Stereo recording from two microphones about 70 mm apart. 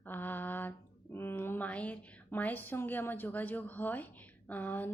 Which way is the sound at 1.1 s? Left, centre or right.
Left.